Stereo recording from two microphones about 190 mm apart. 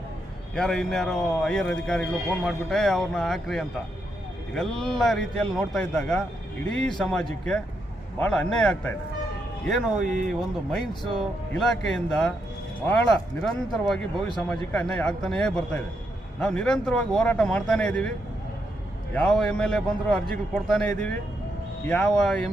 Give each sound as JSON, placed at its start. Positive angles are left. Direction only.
{"t": 0.5, "sound": "a man's voice", "side_deg": 5}
{"t": 10.0, "sound": "speech", "side_deg": -40}
{"t": 11.6, "sound": "a man's voice", "side_deg": 5}
{"t": 13.4, "sound": "a man's voice", "side_deg": 0}
{"t": 19.1, "sound": "a man's voice", "side_deg": 5}